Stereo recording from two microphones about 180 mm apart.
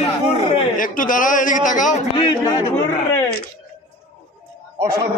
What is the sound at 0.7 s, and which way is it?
A man's voice, 50° left (ahead or behind).